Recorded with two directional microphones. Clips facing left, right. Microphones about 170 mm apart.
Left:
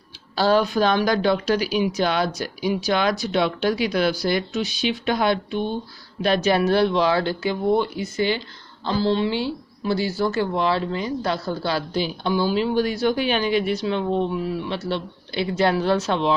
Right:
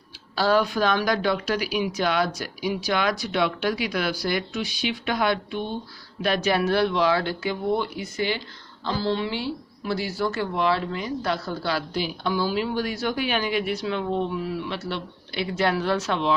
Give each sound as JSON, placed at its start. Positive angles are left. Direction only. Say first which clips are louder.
{"t": 0.3, "sound": "a woman's voice", "louder": "left 3 dB", "side_deg": 30}